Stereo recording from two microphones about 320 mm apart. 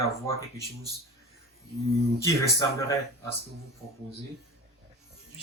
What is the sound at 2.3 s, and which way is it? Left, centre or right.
Speech, centre.